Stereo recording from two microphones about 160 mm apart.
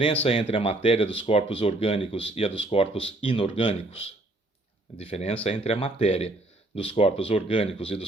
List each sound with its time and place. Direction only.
0.0 s speech: 35° left (ahead or behind)